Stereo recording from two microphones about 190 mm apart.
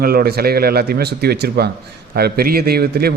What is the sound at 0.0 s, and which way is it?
A man's voice, 55° right (ahead or behind).